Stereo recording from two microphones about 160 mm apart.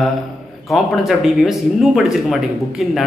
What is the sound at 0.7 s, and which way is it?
Speech, centre (ahead or behind).